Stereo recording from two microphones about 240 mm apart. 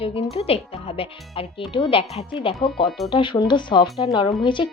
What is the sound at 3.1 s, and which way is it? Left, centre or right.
Speech, centre.